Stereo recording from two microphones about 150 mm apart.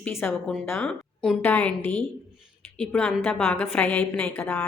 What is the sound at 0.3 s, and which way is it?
Speech, 5° left (ahead or behind).